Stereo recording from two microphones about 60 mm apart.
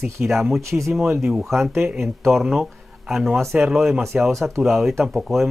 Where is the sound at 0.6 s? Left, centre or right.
Right.